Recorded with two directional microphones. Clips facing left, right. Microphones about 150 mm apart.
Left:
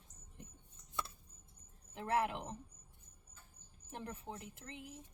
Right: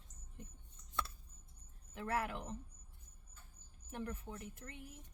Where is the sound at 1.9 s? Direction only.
25° left (ahead or behind).